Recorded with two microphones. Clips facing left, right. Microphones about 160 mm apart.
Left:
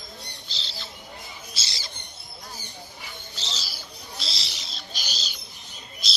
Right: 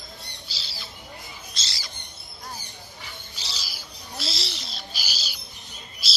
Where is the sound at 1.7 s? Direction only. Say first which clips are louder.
Left 1 dB; 25° left (ahead or behind).